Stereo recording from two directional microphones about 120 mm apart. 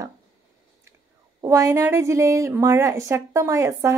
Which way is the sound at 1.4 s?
25° right (ahead or behind).